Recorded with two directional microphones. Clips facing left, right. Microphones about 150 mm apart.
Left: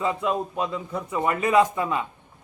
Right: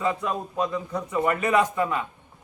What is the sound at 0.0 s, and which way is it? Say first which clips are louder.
A man's voice: left 2 dB; 20° left (ahead or behind).